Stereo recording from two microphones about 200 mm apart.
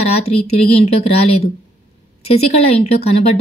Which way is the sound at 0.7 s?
30° left (ahead or behind).